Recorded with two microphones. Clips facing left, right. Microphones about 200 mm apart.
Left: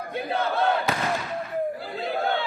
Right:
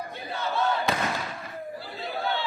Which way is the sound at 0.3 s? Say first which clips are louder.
Left 3 dB; 55° left (ahead or behind).